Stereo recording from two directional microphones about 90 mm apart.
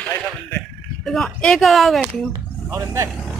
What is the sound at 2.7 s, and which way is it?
Speech, 30° right (ahead or behind).